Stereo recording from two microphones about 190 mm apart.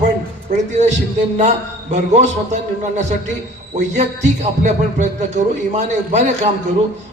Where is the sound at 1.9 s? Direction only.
40° right (ahead or behind).